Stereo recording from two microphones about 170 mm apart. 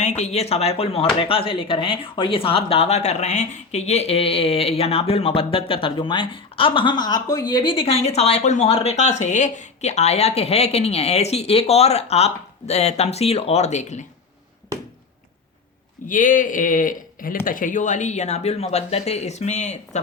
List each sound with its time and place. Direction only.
0.0 s speech: 40° left (ahead or behind)
16.0 s speech: 50° left (ahead or behind)